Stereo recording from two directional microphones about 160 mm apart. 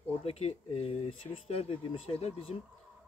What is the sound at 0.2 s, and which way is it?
A man's voice, 40° left (ahead or behind).